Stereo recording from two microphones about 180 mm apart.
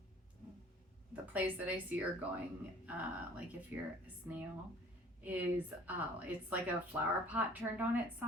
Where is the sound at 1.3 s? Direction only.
10° right (ahead or behind).